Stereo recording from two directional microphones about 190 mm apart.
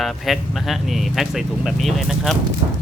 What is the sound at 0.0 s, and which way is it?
Speech, centre (ahead or behind).